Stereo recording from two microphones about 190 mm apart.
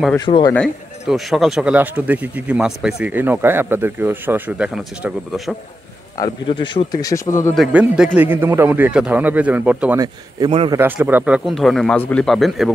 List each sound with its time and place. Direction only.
0.2 s speech: 25° left (ahead or behind)
0.6 s speech: centre (ahead or behind)
6.2 s speech: 25° left (ahead or behind)
7.5 s speech: 5° right (ahead or behind)
10.4 s a man's voice: 30° right (ahead or behind)
10.7 s speech: 10° right (ahead or behind)